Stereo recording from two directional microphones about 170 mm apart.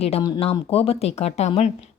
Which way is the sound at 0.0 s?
35° left (ahead or behind).